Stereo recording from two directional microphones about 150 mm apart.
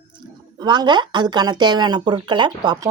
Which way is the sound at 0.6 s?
30° right (ahead or behind).